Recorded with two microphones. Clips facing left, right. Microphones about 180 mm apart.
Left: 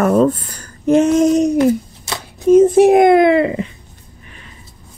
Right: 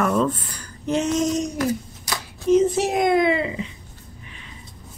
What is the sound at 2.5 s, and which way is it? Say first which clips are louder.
A child's voice: left 10 dB; 50° left (ahead or behind).